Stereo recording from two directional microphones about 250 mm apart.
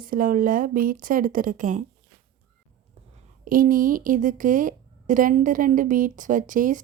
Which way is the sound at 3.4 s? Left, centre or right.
Right.